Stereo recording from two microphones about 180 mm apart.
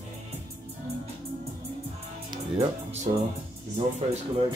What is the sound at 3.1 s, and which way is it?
Music, 45° right (ahead or behind).